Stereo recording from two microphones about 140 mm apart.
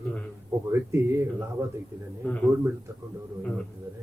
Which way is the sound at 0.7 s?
20° right (ahead or behind).